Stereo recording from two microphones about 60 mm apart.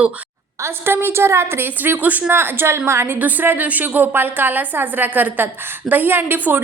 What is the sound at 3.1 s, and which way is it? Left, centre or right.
A woman's voice, right.